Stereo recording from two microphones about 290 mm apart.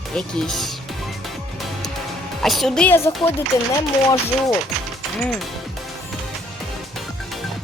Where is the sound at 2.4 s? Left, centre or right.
Centre.